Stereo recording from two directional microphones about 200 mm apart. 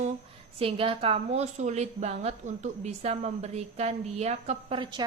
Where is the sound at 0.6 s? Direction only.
25° right (ahead or behind).